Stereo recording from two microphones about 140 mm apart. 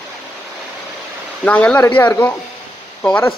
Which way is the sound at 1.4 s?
10° left (ahead or behind).